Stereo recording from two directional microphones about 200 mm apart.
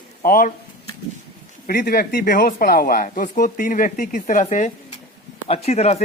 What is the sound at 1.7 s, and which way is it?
Speech, 50° left (ahead or behind).